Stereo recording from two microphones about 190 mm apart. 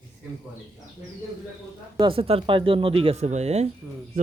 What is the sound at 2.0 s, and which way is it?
A man's voice, 30° right (ahead or behind).